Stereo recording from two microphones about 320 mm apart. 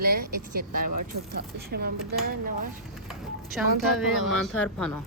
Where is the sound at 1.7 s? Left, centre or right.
Right.